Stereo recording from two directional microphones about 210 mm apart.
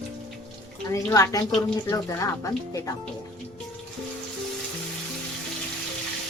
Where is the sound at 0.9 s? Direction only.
15° left (ahead or behind).